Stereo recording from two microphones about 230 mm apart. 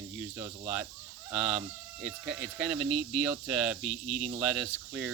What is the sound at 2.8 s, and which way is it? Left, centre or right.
Speech, right.